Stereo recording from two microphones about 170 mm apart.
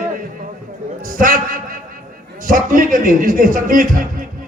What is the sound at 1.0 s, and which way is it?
A man's voice, 50° right (ahead or behind).